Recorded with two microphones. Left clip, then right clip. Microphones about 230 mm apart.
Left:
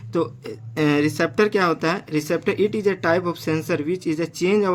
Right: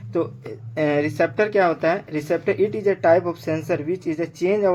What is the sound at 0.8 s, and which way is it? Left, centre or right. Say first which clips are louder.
Speech: even; left.